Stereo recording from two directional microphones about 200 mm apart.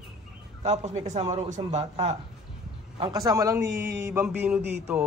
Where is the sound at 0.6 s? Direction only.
35° right (ahead or behind).